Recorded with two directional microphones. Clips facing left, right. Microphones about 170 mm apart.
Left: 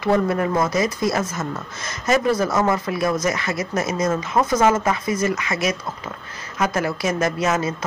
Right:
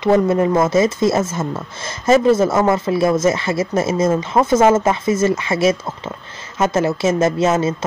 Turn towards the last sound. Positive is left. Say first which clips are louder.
# right 5 dB
turn(degrees=-25)  # may be behind; listen again after turning